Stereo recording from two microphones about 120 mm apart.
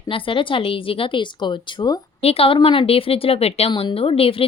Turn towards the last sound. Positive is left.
turn(degrees=50)  # may be behind; listen again after turning